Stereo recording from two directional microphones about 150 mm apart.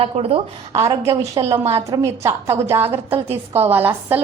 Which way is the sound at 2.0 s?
20° right (ahead or behind).